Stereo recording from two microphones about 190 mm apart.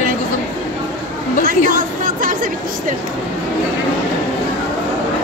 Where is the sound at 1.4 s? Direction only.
45° right (ahead or behind).